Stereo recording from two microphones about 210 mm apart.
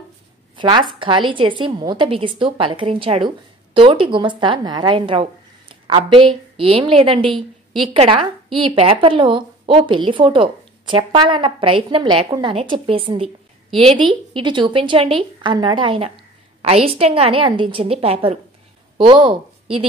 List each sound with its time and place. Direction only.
0.6 s a woman's voice: 20° right (ahead or behind)